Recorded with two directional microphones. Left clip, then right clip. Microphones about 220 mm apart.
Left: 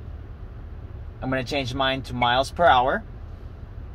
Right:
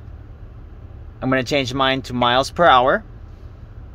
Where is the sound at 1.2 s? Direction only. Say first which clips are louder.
Right 7 dB; 55° right (ahead or behind).